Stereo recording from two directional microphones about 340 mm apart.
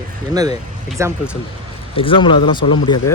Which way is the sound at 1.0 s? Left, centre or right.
Centre.